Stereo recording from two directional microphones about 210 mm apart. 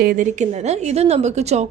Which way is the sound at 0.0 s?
40° right (ahead or behind).